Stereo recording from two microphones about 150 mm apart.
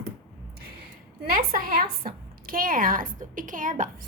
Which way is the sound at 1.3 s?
70° right (ahead or behind).